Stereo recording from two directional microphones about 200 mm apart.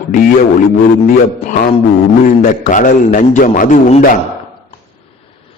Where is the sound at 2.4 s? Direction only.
40° left (ahead or behind).